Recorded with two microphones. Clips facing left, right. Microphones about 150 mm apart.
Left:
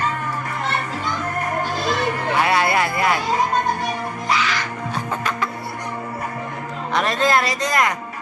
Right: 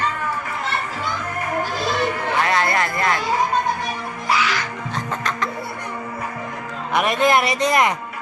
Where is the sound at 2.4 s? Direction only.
10° left (ahead or behind).